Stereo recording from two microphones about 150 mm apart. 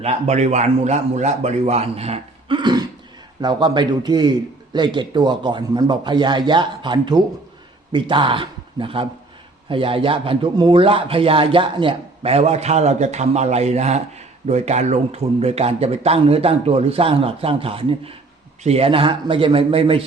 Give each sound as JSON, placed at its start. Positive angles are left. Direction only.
{"t": 0.0, "sound": "a man's voice", "side_deg": -50}